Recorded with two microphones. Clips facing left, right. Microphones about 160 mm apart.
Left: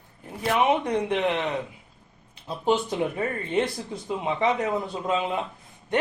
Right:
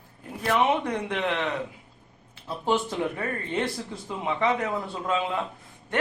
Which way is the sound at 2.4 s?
20° left (ahead or behind).